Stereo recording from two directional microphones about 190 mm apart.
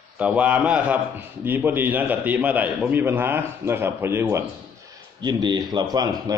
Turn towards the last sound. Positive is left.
turn(degrees=-20)  # may be behind; listen again after turning